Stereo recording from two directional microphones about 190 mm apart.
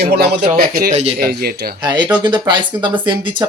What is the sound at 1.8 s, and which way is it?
Speech, 20° right (ahead or behind).